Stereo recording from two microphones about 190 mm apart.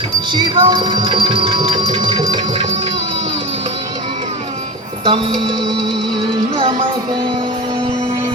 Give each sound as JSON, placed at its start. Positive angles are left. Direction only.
{"t": 0.3, "sound": "a sound", "side_deg": -25}
{"t": 5.0, "sound": "speech", "side_deg": -25}
{"t": 6.6, "sound": "music", "side_deg": -30}